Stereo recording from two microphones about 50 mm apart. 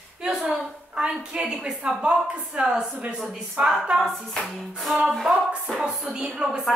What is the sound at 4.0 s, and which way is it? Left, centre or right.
Clapping, centre.